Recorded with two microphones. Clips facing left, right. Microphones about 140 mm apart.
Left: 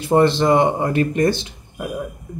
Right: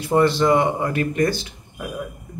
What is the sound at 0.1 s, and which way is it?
Speech, 25° left (ahead or behind).